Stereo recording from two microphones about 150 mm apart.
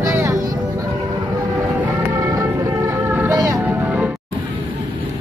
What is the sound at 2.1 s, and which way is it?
Music, 20° right (ahead or behind).